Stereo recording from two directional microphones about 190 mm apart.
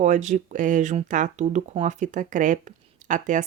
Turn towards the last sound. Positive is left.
turn(degrees=-40)  # may be behind; listen again after turning